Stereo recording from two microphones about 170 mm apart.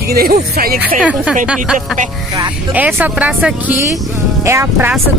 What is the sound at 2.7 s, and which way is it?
Speech, 10° right (ahead or behind).